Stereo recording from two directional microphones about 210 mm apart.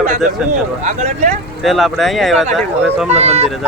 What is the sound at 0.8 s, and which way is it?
Speech, 35° right (ahead or behind).